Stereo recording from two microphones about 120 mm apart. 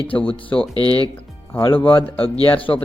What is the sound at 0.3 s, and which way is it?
Speech, 45° left (ahead or behind).